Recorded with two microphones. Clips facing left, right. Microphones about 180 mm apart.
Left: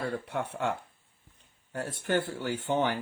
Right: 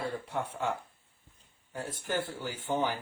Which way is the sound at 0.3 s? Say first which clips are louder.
Left 2 dB; 65° left (ahead or behind).